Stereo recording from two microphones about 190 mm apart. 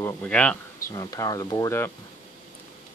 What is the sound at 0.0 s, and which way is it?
Speech, 5° left (ahead or behind).